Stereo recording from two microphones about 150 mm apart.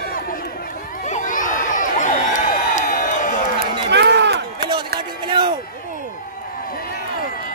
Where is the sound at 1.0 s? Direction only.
55° left (ahead or behind).